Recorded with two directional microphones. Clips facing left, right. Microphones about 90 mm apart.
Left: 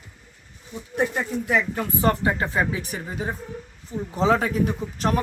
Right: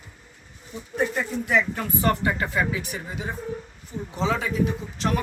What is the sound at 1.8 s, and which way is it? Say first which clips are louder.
Speech: left 2 dB; 30° left (ahead or behind).